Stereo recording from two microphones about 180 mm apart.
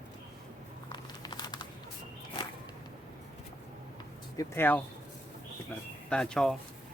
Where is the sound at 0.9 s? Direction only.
25° left (ahead or behind).